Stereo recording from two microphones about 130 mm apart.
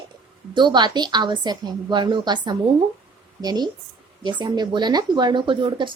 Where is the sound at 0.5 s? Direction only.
35° right (ahead or behind).